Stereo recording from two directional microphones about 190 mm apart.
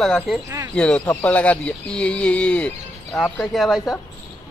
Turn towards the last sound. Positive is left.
turn(degrees=0)  # may be behind; listen again after turning